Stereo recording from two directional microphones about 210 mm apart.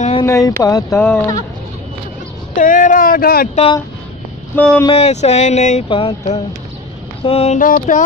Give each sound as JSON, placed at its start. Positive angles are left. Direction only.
{"t": 0.2, "sound": "speech", "side_deg": 15}
{"t": 2.5, "sound": "speech", "side_deg": 40}
{"t": 3.5, "sound": "speech", "side_deg": 25}
{"t": 4.6, "sound": "speech", "side_deg": 5}
{"t": 4.8, "sound": "speech", "side_deg": 30}
{"t": 7.2, "sound": "speech", "side_deg": 30}